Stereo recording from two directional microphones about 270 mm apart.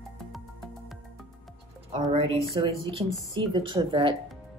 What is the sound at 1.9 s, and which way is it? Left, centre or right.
Speech, centre.